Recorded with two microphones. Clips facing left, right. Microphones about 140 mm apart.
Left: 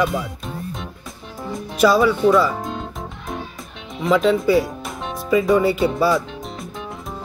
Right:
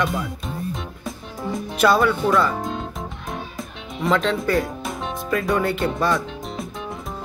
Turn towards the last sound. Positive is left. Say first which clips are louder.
# left 4 dB
turn(degrees=5)  # may be behind; listen again after turning